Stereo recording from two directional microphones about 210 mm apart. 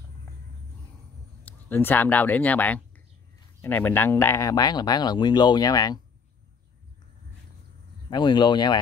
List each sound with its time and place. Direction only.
1.4 s speech: 10° left (ahead or behind)
8.1 s speech: 20° left (ahead or behind)